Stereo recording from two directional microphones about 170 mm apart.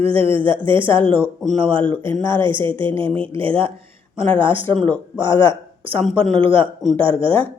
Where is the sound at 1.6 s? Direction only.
30° right (ahead or behind).